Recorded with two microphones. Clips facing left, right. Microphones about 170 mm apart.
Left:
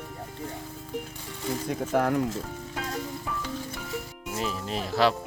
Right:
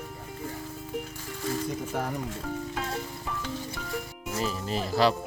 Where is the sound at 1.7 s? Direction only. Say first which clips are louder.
Left 6 dB; 80° left.